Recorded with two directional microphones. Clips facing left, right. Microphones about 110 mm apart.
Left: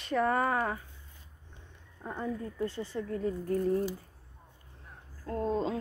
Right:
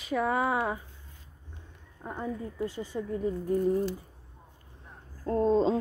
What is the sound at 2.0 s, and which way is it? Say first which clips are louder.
Speech: right 1 dB; 5° right (ahead or behind).